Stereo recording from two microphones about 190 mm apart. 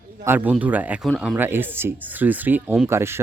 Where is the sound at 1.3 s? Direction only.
10° right (ahead or behind).